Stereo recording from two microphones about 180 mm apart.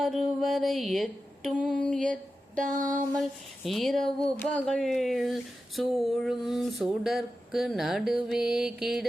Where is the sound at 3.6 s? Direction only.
Centre (ahead or behind).